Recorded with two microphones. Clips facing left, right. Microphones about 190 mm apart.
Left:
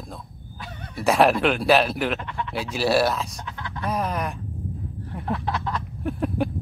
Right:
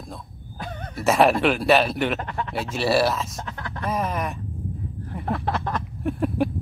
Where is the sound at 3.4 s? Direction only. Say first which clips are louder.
Right 1 dB; 45° right (ahead or behind).